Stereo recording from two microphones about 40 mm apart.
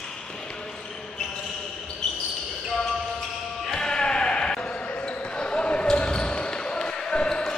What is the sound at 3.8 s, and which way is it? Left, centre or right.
Basketball bounce, centre.